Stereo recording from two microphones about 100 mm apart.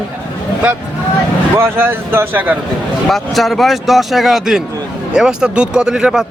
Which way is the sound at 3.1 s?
Centre (ahead or behind).